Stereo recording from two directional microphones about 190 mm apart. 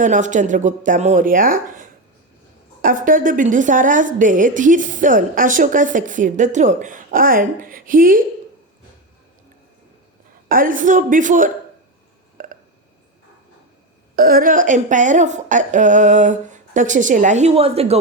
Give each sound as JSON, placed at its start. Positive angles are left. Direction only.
{"t": 0.0, "sound": "a woman's voice", "side_deg": -40}
{"t": 10.5, "sound": "a woman's voice", "side_deg": -45}
{"t": 12.4, "sound": "telephone dialing", "side_deg": -45}
{"t": 14.2, "sound": "a woman's voice", "side_deg": -50}